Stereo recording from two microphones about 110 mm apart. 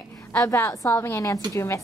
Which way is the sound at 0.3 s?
15° left (ahead or behind).